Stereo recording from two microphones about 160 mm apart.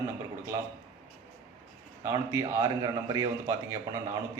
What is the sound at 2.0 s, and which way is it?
A man's voice, 15° right (ahead or behind).